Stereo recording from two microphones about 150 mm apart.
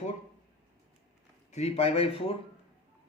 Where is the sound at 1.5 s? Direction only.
45° left (ahead or behind).